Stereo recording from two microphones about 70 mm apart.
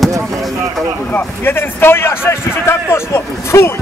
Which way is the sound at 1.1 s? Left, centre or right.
Left.